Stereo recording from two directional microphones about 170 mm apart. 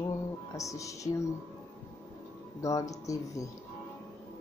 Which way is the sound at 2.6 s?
20° left (ahead or behind).